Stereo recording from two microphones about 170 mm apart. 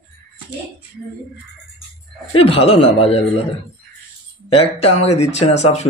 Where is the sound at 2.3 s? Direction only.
35° left (ahead or behind).